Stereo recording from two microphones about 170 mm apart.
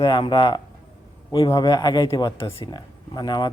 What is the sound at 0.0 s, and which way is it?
Speech, 25° left (ahead or behind).